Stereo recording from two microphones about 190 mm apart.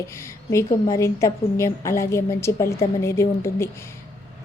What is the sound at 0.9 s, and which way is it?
A woman's voice, 15° left (ahead or behind).